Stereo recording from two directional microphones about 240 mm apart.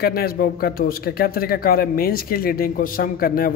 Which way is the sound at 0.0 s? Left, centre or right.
Left.